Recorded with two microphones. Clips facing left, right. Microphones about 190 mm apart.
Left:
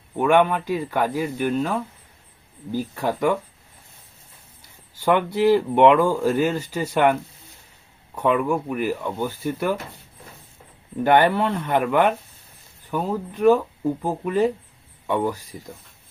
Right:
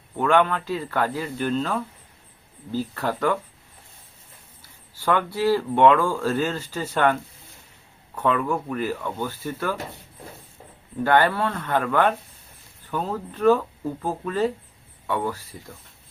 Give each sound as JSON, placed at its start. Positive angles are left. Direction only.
{"t": 0.2, "sound": "speech", "side_deg": 15}
{"t": 4.9, "sound": "speech", "side_deg": 20}
{"t": 11.0, "sound": "speech", "side_deg": 20}